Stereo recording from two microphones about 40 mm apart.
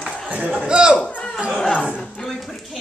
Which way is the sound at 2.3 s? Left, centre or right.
Centre.